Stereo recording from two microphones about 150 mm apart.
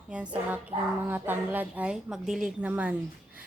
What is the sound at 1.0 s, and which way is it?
A woman's voice, 15° right (ahead or behind).